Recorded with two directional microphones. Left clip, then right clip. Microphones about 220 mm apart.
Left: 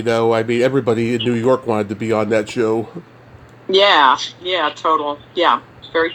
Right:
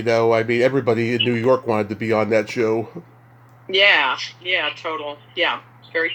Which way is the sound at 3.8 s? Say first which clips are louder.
Left 4 dB; 15° left (ahead or behind).